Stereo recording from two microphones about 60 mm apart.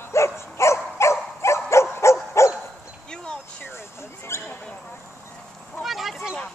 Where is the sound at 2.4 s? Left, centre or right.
Left.